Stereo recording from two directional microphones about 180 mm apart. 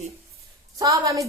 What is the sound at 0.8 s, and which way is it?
Speech, 20° right (ahead or behind).